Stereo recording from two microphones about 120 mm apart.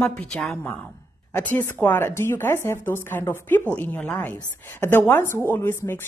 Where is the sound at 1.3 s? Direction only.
15° left (ahead or behind).